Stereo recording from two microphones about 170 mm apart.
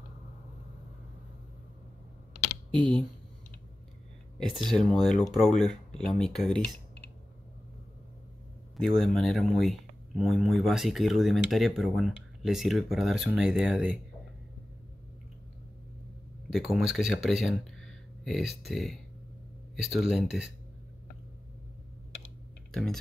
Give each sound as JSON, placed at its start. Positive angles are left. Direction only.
{"t": 2.8, "sound": "speech", "side_deg": 5}
{"t": 4.4, "sound": "speech", "side_deg": 0}
{"t": 8.7, "sound": "speech", "side_deg": 0}
{"t": 16.5, "sound": "speech", "side_deg": 0}
{"t": 22.7, "sound": "speech", "side_deg": 0}